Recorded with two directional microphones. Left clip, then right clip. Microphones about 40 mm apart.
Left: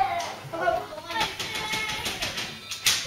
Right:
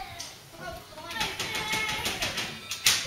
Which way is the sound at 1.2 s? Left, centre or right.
Centre.